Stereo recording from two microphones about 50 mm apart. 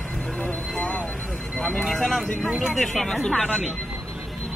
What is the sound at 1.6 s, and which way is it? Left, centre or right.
Speech, left.